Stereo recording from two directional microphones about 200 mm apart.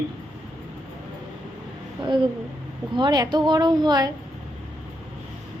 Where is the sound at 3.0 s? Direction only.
20° right (ahead or behind).